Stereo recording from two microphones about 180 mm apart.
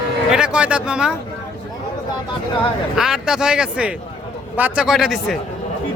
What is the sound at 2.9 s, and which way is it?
Speech, 5° right (ahead or behind).